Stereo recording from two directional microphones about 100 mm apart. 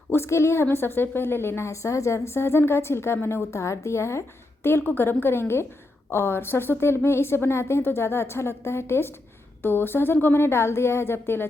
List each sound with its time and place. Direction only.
0.1 s a woman's voice: 25° left (ahead or behind)